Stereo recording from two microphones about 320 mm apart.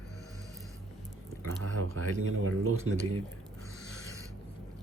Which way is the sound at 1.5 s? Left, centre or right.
Right.